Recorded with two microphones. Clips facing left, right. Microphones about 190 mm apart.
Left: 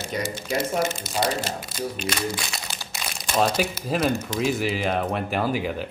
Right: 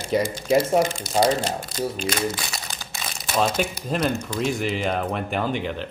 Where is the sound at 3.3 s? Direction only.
Centre (ahead or behind).